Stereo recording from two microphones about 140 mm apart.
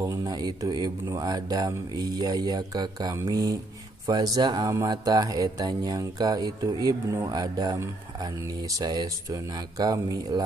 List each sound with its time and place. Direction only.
0.0 s speech: 25° right (ahead or behind)